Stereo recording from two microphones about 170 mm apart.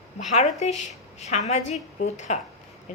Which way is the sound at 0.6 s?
40° left (ahead or behind).